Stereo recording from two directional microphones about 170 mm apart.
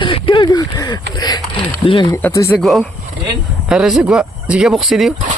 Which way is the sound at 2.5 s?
Centre (ahead or behind).